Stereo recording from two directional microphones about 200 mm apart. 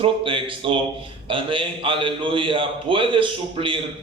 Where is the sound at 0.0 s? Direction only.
25° right (ahead or behind).